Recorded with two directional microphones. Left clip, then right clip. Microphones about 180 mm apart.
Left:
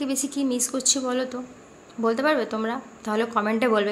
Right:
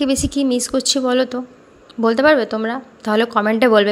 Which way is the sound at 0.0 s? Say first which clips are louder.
Right 9 dB; 40° right (ahead or behind).